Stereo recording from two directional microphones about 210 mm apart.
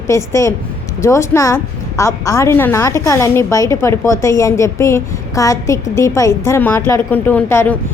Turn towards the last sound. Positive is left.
turn(degrees=10)  # may be behind; listen again after turning